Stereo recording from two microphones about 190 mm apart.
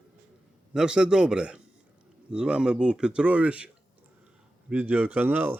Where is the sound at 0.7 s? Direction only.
5° right (ahead or behind).